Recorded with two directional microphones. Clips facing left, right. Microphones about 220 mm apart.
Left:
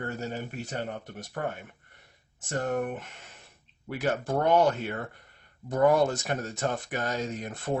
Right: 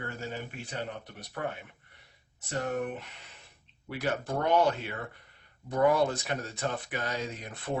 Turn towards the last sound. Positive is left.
turn(degrees=45)  # may be behind; listen again after turning